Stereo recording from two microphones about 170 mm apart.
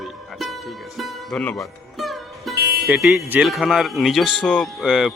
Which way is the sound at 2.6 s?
65° right (ahead or behind).